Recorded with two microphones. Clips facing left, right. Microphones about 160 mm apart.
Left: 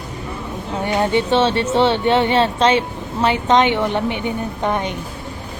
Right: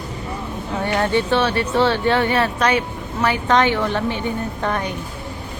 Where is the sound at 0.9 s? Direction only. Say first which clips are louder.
Left 2 dB; 15° left (ahead or behind).